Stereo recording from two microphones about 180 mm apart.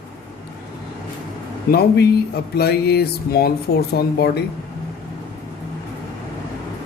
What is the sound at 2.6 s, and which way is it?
Speech, 65° left (ahead or behind).